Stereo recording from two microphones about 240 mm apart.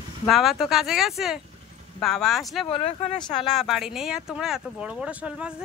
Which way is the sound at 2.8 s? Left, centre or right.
Left.